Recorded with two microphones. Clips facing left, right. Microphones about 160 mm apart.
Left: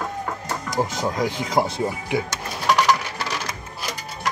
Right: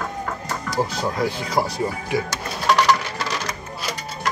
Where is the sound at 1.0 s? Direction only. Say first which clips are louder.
Even; 15° left (ahead or behind).